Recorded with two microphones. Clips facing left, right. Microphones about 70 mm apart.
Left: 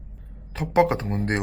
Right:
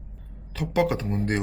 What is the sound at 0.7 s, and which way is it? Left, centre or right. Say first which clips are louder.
Speech: left 4 dB; left.